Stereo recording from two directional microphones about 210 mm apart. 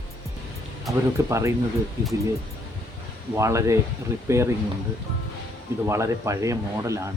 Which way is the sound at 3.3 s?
15° right (ahead or behind).